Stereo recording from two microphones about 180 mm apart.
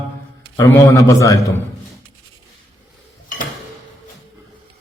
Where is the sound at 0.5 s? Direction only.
15° left (ahead or behind).